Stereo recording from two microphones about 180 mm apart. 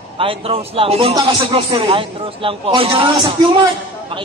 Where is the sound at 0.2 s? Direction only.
30° right (ahead or behind).